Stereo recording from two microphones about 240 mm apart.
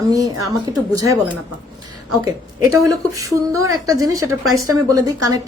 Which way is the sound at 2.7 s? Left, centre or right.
Centre.